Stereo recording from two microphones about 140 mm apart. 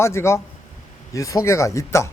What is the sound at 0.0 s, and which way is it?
A man's voice, 20° left (ahead or behind).